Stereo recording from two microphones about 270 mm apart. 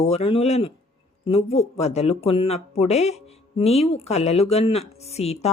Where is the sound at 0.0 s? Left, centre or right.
Left.